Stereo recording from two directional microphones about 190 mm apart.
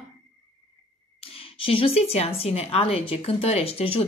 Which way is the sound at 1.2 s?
30° left (ahead or behind).